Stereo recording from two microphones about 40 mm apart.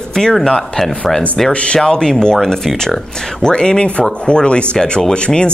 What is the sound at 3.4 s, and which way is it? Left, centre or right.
Speech, centre.